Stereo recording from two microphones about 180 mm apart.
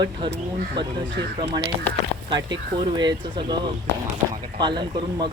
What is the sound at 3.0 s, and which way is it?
Speech, 25° right (ahead or behind).